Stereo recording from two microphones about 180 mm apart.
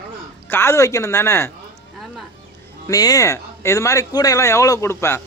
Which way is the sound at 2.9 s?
20° left (ahead or behind).